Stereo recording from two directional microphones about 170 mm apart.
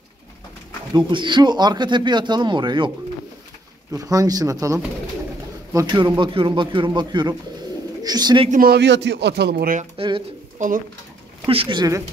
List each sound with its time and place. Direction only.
0.9 s speech: 25° right (ahead or behind)
3.9 s speech: 20° right (ahead or behind)
8.5 s speech: 60° right (ahead or behind)
9.9 s speech: 30° right (ahead or behind)
11.4 s speech: 30° right (ahead or behind)